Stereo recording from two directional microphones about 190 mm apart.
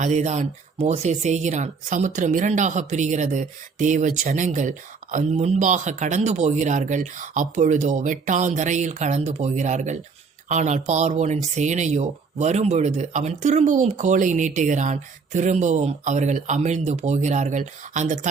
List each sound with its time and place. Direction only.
0.0 s speech: 35° right (ahead or behind)